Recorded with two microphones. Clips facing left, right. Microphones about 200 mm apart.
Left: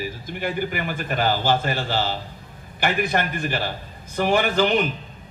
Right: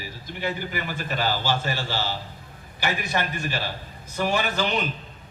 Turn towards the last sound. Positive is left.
turn(degrees=50)  # may be behind; listen again after turning